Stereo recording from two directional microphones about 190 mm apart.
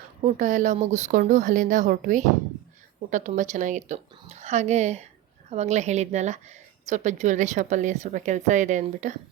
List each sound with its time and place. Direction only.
0.2 s a woman's voice: 40° right (ahead or behind)